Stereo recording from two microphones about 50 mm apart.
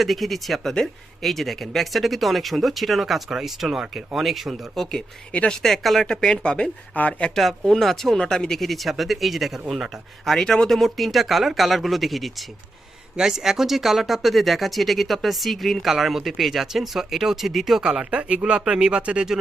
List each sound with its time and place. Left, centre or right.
0.0 s speech: centre
5.3 s a woman's voice: left
5.6 s speech: centre
6.1 s a woman's voice: centre
7.3 s speech: centre
10.2 s speech: centre
13.1 s speech: centre
18.0 s speech: right